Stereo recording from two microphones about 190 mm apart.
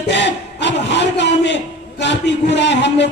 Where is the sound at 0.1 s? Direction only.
70° left (ahead or behind).